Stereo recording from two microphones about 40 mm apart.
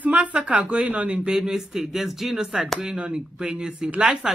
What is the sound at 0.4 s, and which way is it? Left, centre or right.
Speech, right.